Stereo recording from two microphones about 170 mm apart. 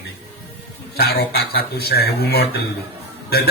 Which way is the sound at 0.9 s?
70° left (ahead or behind).